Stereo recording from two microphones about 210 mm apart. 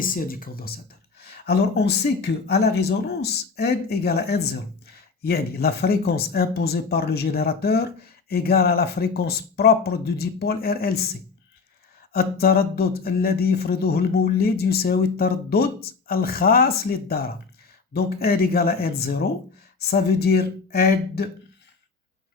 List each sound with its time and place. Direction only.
0.0 s speech: 40° left (ahead or behind)
12.1 s speech: 45° left (ahead or behind)